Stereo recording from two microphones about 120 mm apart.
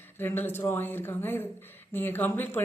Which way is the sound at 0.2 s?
15° left (ahead or behind).